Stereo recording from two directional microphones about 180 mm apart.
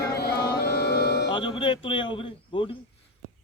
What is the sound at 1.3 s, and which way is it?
Speech, 30° left (ahead or behind).